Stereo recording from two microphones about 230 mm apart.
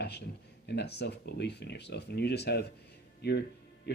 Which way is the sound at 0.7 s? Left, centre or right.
Left.